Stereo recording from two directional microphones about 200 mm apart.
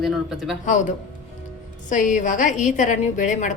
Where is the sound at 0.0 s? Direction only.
Centre (ahead or behind).